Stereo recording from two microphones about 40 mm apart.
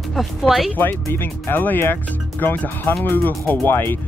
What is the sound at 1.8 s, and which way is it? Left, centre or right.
Speech, left.